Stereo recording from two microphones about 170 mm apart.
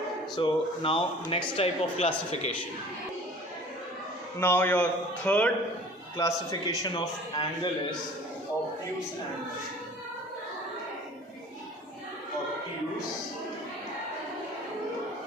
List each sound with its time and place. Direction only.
0.3 s speech: 30° left (ahead or behind)
4.4 s a man's voice: 10° left (ahead or behind)
6.1 s a man's voice: 20° left (ahead or behind)